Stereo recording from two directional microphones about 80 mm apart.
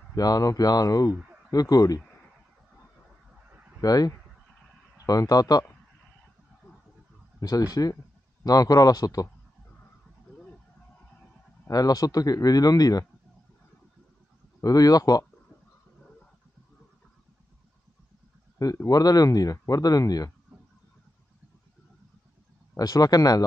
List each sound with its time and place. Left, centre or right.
0.1 s speech: left
3.8 s speech: left
7.3 s speech: left
11.7 s speech: left
14.6 s speech: left
18.6 s speech: left
22.8 s speech: left